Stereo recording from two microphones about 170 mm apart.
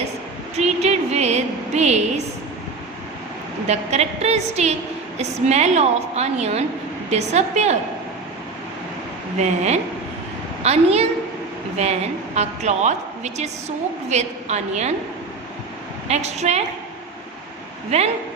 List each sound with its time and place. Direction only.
0.5 s a woman's voice: 40° right (ahead or behind)
3.7 s a woman's voice: 40° right (ahead or behind)
9.4 s a woman's voice: 40° right (ahead or behind)
16.0 s a woman's voice: 40° right (ahead or behind)
17.9 s a woman's voice: 35° right (ahead or behind)